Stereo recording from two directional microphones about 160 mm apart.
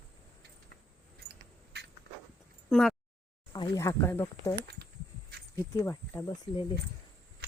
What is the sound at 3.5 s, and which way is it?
Speech, 20° left (ahead or behind).